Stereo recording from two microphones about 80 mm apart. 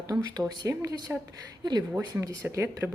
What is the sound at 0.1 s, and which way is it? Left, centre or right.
Speech, right.